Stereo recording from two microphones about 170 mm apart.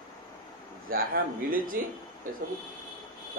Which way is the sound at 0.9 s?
55° right (ahead or behind).